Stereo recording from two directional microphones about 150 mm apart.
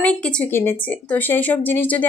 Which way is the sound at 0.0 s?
10° left (ahead or behind).